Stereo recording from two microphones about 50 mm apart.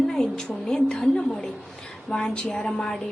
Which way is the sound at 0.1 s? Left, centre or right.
Centre.